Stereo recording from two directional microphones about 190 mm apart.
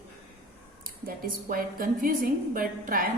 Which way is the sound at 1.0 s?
50° right (ahead or behind).